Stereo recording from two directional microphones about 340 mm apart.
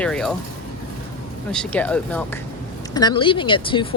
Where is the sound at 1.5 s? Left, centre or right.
Centre.